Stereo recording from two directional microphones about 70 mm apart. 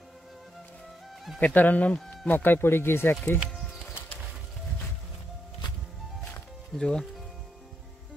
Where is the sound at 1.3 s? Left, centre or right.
Left.